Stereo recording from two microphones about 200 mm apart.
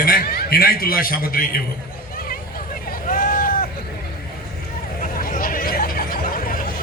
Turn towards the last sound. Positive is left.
turn(degrees=45)  # may be behind; listen again after turning